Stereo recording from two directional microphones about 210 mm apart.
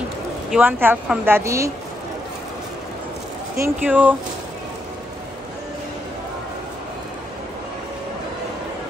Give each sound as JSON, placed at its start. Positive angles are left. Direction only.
{"t": 0.5, "sound": "a woman's voice", "side_deg": -10}
{"t": 3.5, "sound": "a woman's voice", "side_deg": -10}